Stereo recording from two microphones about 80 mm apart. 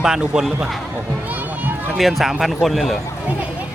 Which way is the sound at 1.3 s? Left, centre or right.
Right.